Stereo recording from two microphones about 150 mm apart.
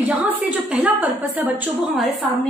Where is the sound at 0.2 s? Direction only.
10° right (ahead or behind).